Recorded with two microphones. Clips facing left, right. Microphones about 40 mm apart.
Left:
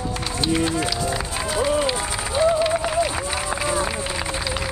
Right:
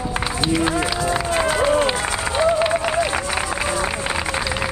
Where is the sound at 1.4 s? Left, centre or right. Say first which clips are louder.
Right 3 dB; right.